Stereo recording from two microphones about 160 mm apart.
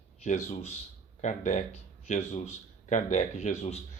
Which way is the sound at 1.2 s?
50° left (ahead or behind).